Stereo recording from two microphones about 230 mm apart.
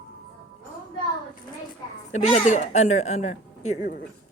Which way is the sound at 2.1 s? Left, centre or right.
Left.